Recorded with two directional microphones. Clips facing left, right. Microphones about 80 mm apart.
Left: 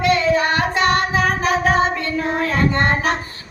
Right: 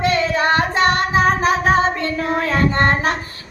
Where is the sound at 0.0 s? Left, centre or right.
Right.